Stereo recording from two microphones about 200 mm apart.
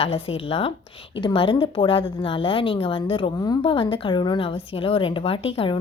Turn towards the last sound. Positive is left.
turn(degrees=25)  # may be behind; listen again after turning